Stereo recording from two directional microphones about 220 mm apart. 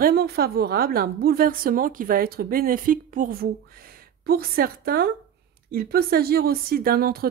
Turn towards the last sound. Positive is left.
turn(degrees=-45)  # may be behind; listen again after turning